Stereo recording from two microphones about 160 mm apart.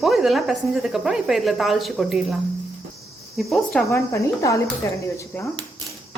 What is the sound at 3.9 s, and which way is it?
Cricket, 20° left (ahead or behind).